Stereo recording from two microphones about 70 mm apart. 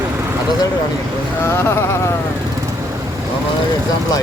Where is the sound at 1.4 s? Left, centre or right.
Left.